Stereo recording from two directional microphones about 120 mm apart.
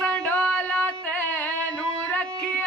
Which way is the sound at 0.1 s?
10° left (ahead or behind).